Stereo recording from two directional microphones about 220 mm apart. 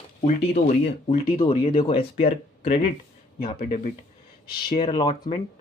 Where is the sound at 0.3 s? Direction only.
30° left (ahead or behind).